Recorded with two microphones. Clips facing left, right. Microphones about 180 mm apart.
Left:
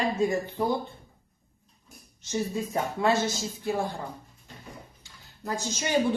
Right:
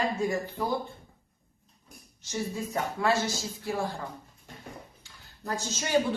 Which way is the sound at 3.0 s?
20° left (ahead or behind).